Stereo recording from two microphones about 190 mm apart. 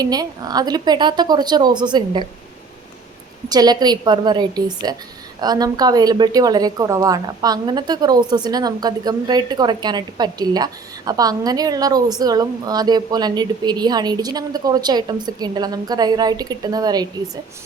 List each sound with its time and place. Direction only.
0.0 s a woman's voice: 20° right (ahead or behind)
3.5 s a woman's voice: 20° right (ahead or behind)